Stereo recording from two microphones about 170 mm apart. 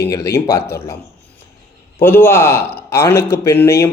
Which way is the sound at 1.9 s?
15° left (ahead or behind).